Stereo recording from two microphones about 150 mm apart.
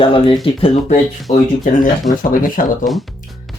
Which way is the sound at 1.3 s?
60° left (ahead or behind).